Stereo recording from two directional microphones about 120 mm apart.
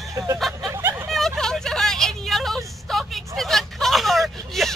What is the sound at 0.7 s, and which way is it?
Vehicle, 20° right (ahead or behind).